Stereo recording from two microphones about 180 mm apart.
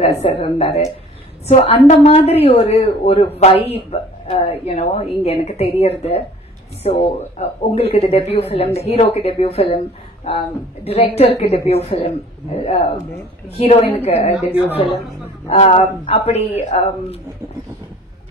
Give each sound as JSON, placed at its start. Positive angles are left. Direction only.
{"t": 0.2, "sound": "speech", "side_deg": 30}
{"t": 14.3, "sound": "speech", "side_deg": -5}
{"t": 15.4, "sound": "speech", "side_deg": 40}